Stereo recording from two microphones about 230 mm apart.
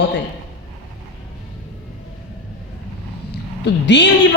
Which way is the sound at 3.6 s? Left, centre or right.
Left.